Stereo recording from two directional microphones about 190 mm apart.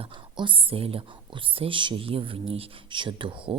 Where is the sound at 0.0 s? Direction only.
25° right (ahead or behind).